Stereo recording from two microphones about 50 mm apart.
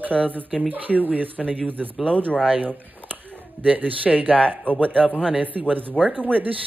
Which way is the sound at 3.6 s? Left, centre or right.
Right.